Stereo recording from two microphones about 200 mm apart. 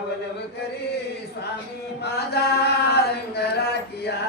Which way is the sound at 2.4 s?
55° left (ahead or behind).